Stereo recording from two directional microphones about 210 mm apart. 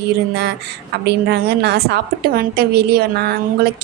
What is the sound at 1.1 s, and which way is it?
A woman's voice, 50° right (ahead or behind).